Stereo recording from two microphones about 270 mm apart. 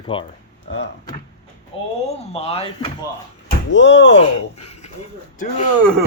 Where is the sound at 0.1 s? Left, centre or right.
Centre.